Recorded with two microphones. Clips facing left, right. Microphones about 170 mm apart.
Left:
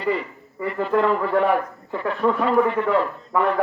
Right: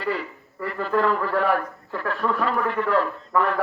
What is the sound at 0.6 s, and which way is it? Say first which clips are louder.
A man's voice: left 2 dB; 15° left (ahead or behind).